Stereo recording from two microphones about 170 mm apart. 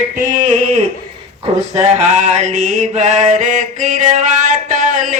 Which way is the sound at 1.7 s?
40° right (ahead or behind).